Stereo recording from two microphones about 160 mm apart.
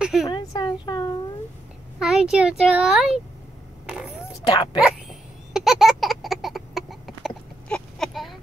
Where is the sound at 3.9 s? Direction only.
5° right (ahead or behind).